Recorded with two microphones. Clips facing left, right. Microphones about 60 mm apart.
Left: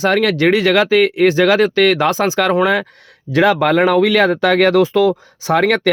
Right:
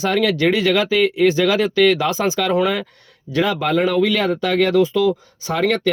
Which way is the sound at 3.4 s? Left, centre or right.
Left.